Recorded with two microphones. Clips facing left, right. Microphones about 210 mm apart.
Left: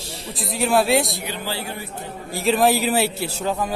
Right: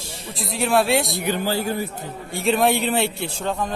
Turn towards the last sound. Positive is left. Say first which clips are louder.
# left 1 dB
turn(degrees=5)  # may be behind; listen again after turning